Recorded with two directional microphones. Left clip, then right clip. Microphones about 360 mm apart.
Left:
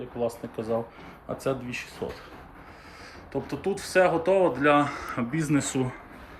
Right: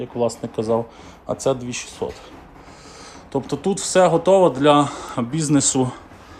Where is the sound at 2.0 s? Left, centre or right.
Centre.